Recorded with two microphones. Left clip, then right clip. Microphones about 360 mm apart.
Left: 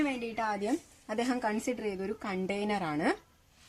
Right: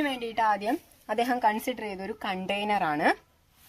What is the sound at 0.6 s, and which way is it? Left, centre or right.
A woman's voice, right.